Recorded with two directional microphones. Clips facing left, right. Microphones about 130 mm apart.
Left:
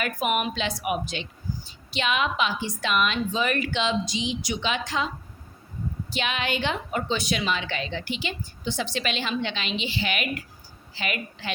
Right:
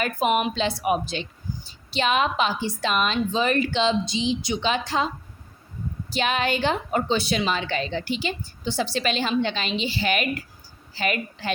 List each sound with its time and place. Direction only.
0.0 s a woman's voice: 30° right (ahead or behind)